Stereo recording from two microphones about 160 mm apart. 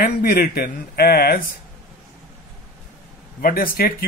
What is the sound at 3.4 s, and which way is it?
Speech, 65° left (ahead or behind).